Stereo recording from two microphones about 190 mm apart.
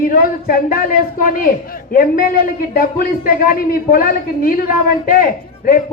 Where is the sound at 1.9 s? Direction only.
50° left (ahead or behind).